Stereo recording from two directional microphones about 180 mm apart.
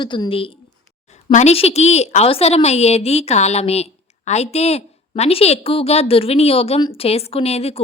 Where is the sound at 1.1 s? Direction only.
40° left (ahead or behind).